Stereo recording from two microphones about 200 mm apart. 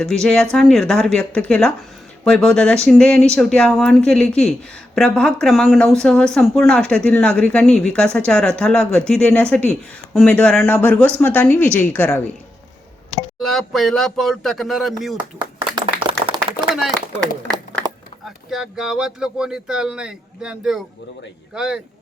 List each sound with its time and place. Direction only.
0.0 s a woman's voice: 5° left (ahead or behind)
13.4 s speech: centre (ahead or behind)
15.4 s clapping: 25° right (ahead or behind)
17.1 s clapping: 10° left (ahead or behind)
18.5 s speech: 5° right (ahead or behind)